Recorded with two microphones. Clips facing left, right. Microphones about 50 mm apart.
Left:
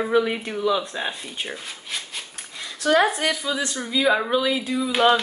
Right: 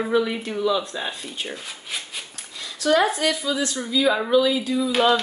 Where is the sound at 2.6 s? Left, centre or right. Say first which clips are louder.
Even; left.